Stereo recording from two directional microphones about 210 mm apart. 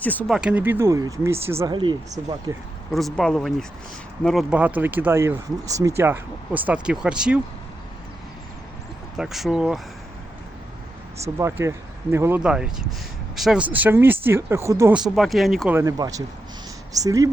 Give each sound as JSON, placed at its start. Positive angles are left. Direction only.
{"t": 0.0, "sound": "speech", "side_deg": 10}
{"t": 0.3, "sound": "speech", "side_deg": -5}
{"t": 2.9, "sound": "speech", "side_deg": 0}
{"t": 9.1, "sound": "speech", "side_deg": 0}
{"t": 11.3, "sound": "speech", "side_deg": -15}
{"t": 14.9, "sound": "speech", "side_deg": 0}
{"t": 15.8, "sound": "speech", "side_deg": -15}